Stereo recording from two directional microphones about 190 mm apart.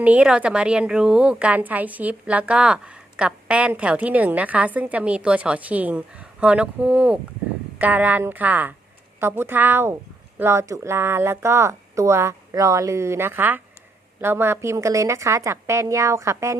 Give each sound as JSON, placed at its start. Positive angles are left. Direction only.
{"t": 0.0, "sound": "a woman's voice", "side_deg": -5}